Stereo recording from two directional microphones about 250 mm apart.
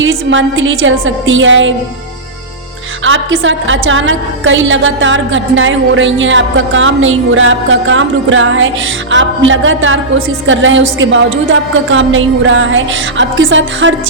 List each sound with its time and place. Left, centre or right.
0.0 s a woman's voice: right
3.0 s a woman's voice: right